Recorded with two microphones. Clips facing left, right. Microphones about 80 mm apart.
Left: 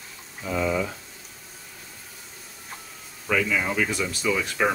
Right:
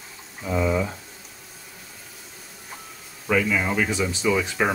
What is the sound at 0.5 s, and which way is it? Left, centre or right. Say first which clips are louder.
Speech: right 2 dB; centre.